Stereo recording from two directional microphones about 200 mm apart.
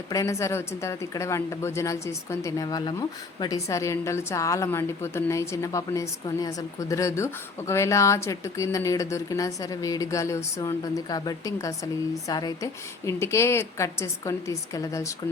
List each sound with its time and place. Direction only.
0.1 s speech: 15° left (ahead or behind)